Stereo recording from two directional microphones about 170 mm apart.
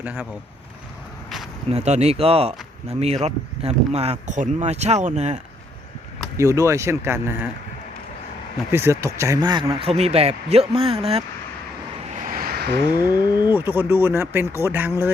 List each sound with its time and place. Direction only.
0.0 s speech: 10° right (ahead or behind)
1.7 s speech: 40° right (ahead or behind)
6.3 s speech: 20° right (ahead or behind)
8.7 s speech: 15° right (ahead or behind); by 11.0 s 35° right (ahead or behind)
12.2 s a sound: 60° right (ahead or behind); by 12.8 s 75° right (ahead or behind)
13.1 s speech: 25° left (ahead or behind)
13.5 s speech: 10° right (ahead or behind)